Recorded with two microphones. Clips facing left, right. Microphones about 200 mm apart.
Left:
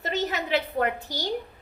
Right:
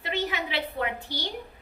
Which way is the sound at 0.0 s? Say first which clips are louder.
Left 2 dB; 40° left (ahead or behind).